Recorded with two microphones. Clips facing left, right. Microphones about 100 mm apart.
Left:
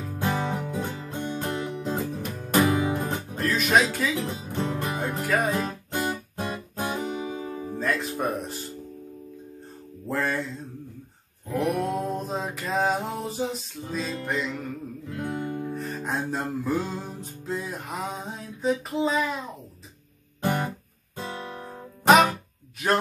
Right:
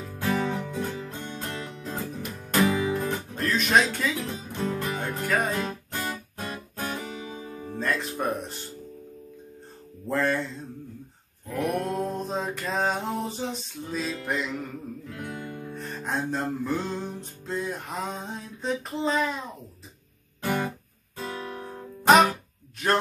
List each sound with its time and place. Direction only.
0.1 s music: 30° left (ahead or behind)
3.3 s music: 5° left (ahead or behind)
4.2 s music: 20° left (ahead or behind)
5.9 s music: 20° left (ahead or behind)
7.6 s music: 5° left (ahead or behind)
10.0 s music: centre (ahead or behind)
11.6 s music: 5° left (ahead or behind)
15.0 s guitar: 25° left (ahead or behind)
15.7 s music: 5° left (ahead or behind)
21.3 s guitar: 25° left (ahead or behind)
21.6 s music: 5° left (ahead or behind)